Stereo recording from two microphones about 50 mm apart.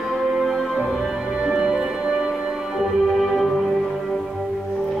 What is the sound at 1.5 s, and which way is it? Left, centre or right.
Music, centre.